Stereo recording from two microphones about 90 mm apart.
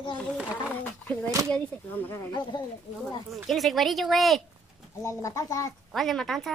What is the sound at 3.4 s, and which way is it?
A woman's voice, centre (ahead or behind).